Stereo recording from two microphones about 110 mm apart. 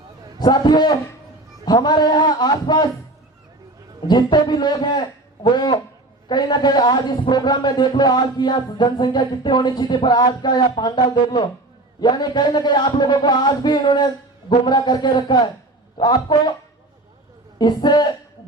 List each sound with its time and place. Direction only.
0.3 s a man's voice: 40° left (ahead or behind)
4.0 s a man's voice: 40° left (ahead or behind)
17.6 s a man's voice: 40° left (ahead or behind)